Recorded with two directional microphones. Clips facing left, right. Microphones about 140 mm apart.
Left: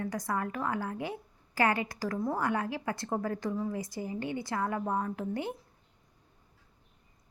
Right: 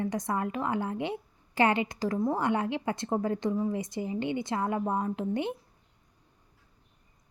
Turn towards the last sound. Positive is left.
turn(degrees=-20)  # may be behind; listen again after turning